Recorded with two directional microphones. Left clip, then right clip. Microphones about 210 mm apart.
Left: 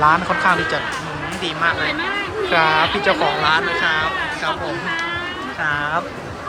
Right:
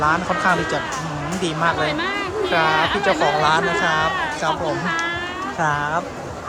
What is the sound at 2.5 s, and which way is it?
Speech, centre (ahead or behind).